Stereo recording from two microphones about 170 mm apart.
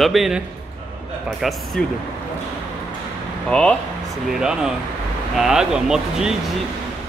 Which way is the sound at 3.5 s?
5° left (ahead or behind).